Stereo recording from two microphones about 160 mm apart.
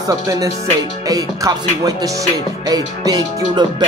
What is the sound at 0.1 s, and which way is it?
Music, 20° right (ahead or behind).